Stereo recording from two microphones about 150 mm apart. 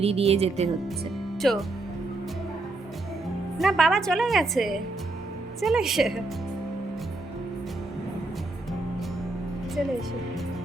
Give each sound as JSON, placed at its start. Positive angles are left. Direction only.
{"t": 0.0, "sound": "speech", "side_deg": -45}
{"t": 1.4, "sound": "speech", "side_deg": 0}
{"t": 3.6, "sound": "a woman's voice", "side_deg": 0}